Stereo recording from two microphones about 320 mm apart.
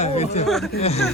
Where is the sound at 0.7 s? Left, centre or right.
Centre.